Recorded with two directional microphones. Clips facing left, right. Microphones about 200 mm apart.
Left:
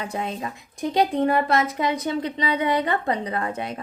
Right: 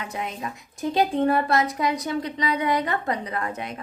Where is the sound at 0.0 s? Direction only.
30° left (ahead or behind).